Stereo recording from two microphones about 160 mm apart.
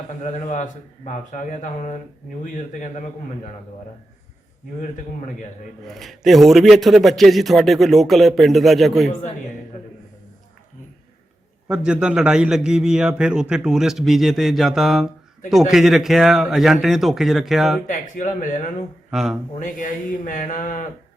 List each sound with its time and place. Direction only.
0.2 s speech: 50° left (ahead or behind)
5.8 s a man's voice: centre (ahead or behind)
11.7 s a man's voice: 5° right (ahead or behind)
17.8 s speech: 55° left (ahead or behind)
19.1 s a man's voice: 5° right (ahead or behind)
19.5 s speech: 55° left (ahead or behind)